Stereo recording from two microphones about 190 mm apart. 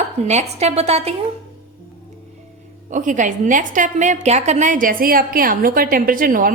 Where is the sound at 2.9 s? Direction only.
40° right (ahead or behind).